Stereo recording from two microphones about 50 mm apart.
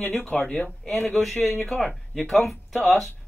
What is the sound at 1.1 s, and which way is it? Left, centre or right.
Speech, centre.